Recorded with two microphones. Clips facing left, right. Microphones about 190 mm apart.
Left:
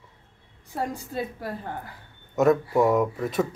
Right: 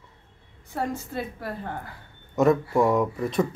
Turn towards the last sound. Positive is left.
turn(degrees=0)  # may be behind; listen again after turning